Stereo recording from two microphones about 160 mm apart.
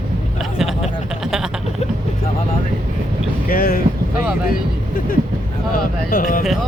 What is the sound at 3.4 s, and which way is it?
Speech, 65° left (ahead or behind).